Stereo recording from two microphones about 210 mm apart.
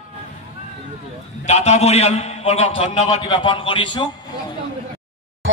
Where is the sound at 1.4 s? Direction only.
30° left (ahead or behind).